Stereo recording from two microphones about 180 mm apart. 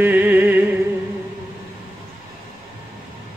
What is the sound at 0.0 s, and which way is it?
Music, 10° right (ahead or behind).